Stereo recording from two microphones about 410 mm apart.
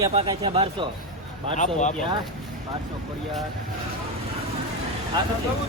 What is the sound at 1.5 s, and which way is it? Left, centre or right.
Speech, centre.